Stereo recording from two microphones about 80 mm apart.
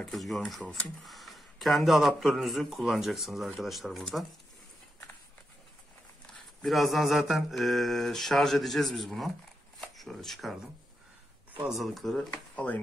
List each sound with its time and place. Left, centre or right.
0.0 s speech: centre
6.6 s speech: centre
11.6 s speech: centre
12.5 s speech: centre